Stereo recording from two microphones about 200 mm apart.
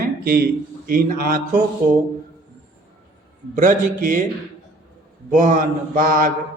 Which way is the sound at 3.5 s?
45° right (ahead or behind).